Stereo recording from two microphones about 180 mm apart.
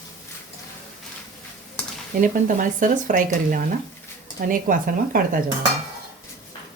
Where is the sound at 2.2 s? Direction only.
45° right (ahead or behind).